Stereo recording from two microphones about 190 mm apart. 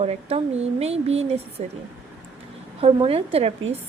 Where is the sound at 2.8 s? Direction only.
30° right (ahead or behind).